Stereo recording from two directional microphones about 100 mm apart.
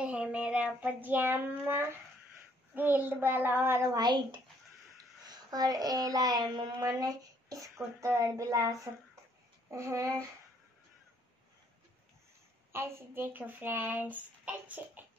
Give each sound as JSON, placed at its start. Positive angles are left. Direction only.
{"t": 0.0, "sound": "child singing", "side_deg": -10}
{"t": 2.7, "sound": "speech", "side_deg": -20}
{"t": 3.9, "sound": "a child's voice", "side_deg": -45}
{"t": 9.7, "sound": "a sound", "side_deg": -30}
{"t": 12.7, "sound": "speech", "side_deg": -25}